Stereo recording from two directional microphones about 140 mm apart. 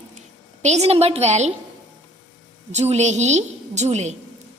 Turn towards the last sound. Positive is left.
turn(degrees=-55)  # may be behind; listen again after turning